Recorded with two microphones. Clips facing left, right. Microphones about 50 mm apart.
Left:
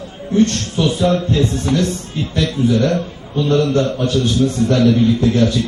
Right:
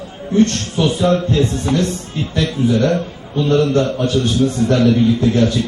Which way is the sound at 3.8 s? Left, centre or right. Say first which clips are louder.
Even; centre.